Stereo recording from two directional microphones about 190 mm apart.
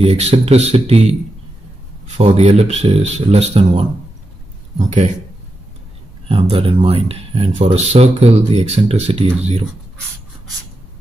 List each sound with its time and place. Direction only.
0.0 s speech: 35° right (ahead or behind)
2.1 s speech: 40° right (ahead or behind)
6.2 s speech: 30° right (ahead or behind)